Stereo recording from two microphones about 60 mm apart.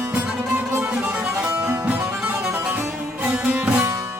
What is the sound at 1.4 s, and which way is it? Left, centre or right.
Music, right.